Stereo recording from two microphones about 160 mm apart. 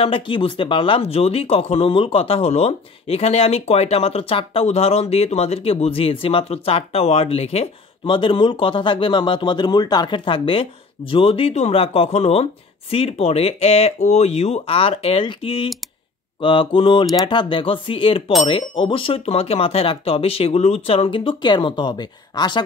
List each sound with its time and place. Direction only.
0.0 s speech: 35° left (ahead or behind)